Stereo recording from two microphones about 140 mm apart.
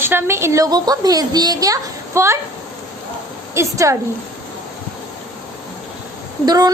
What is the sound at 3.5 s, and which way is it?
Speech, 20° right (ahead or behind).